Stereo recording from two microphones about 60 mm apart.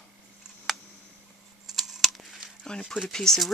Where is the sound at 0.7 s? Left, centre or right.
Centre.